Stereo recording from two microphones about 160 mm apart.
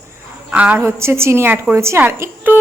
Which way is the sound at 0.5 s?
10° right (ahead or behind).